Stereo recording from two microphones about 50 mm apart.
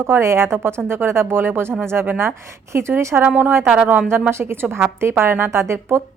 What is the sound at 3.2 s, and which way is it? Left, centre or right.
Speech, right.